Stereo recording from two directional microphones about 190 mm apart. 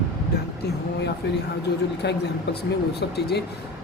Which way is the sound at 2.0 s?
60° left (ahead or behind).